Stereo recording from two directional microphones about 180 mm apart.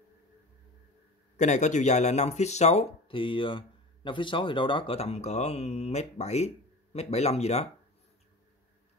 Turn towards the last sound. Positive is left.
turn(degrees=35)  # may be behind; listen again after turning